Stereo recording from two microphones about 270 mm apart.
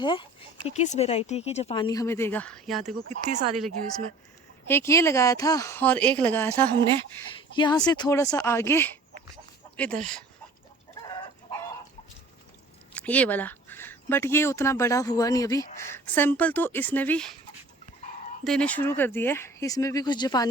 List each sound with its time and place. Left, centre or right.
0.0 s speech: centre
2.8 s speech: right
4.7 s speech: centre
9.3 s dog: centre
12.9 s speech: centre
18.4 s speech: centre